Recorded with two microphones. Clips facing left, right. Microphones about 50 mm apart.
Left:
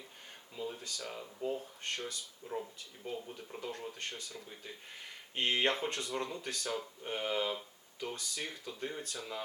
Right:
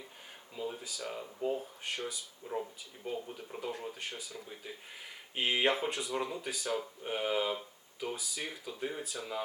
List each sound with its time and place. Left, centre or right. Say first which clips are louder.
0.5 s speech: right 2 dB; centre